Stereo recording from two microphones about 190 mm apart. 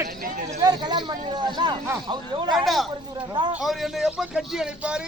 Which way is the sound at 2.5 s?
Centre (ahead or behind).